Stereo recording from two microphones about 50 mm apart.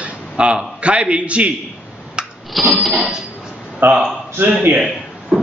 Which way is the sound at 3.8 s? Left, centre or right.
Right.